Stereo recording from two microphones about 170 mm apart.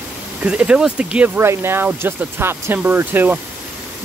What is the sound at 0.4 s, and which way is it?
Speech, 5° right (ahead or behind).